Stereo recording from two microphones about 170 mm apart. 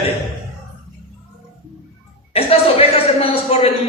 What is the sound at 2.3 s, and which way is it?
A man's voice, 35° left (ahead or behind).